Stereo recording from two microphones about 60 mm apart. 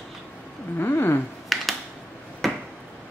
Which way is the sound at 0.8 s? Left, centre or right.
Left.